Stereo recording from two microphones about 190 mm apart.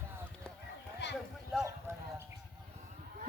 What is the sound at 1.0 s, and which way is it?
Clip-clop, 70° left (ahead or behind).